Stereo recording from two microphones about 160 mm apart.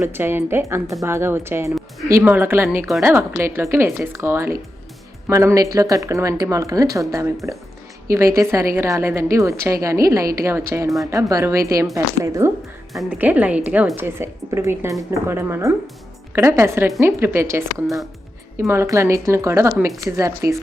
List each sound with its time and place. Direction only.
0.0 s a woman's voice: 15° right (ahead or behind)
10.8 s speech: centre (ahead or behind)
11.1 s a woman's voice: 20° right (ahead or behind)
12.9 s a woman's voice: centre (ahead or behind); by 20.6 s 20° right (ahead or behind)